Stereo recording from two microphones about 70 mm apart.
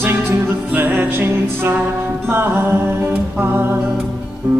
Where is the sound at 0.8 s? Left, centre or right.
Right.